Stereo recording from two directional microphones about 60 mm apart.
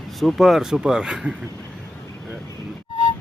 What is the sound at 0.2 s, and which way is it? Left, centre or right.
Speech, centre.